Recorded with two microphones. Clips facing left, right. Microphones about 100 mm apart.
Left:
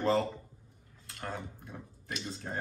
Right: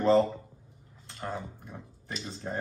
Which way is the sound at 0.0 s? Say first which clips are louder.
Right 6 dB; 30° right (ahead or behind).